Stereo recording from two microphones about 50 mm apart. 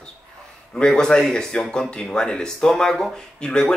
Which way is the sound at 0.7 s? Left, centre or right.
Centre.